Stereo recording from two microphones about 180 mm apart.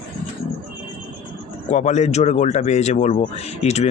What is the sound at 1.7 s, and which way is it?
Speech, 40° left (ahead or behind).